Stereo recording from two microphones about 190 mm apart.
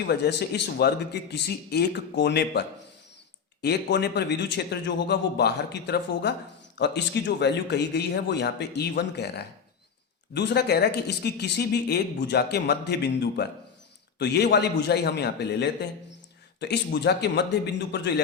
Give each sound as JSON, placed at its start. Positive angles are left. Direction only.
{"t": 0.1, "sound": "speech", "side_deg": 60}